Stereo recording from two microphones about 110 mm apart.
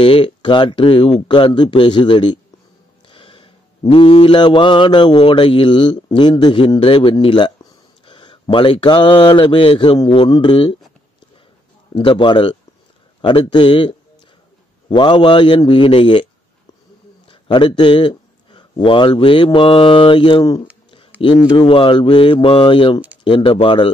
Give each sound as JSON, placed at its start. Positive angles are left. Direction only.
{"t": 0.0, "sound": "a man's voice", "side_deg": 50}
{"t": 1.2, "sound": "a man's voice", "side_deg": 45}
{"t": 3.1, "sound": "music", "side_deg": 50}
{"t": 3.9, "sound": "a man's voice", "side_deg": 55}
{"t": 11.9, "sound": "a man's voice", "side_deg": 50}
{"t": 17.3, "sound": "speech", "side_deg": 50}
{"t": 21.5, "sound": "a man's voice", "side_deg": 55}